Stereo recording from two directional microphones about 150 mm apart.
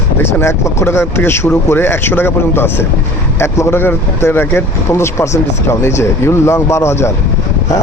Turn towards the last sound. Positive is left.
turn(degrees=20)  # may be behind; listen again after turning